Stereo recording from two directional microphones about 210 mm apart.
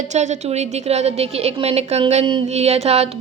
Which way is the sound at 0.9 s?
30° right (ahead or behind).